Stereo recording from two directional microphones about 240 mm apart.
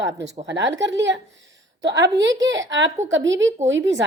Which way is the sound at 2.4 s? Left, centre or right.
Right.